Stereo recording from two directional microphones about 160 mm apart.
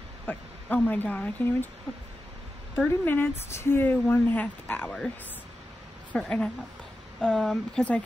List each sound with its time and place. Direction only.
0.3 s speech: 10° left (ahead or behind)
2.7 s speech: 10° left (ahead or behind)
6.1 s speech: 5° left (ahead or behind)